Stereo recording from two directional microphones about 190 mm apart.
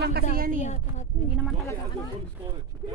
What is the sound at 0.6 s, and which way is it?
Speech, 35° left (ahead or behind).